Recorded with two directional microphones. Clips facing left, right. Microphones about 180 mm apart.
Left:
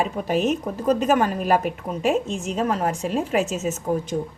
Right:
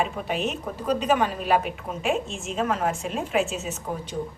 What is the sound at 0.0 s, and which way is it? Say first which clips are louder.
A woman's voice: left 4 dB; 40° left (ahead or behind).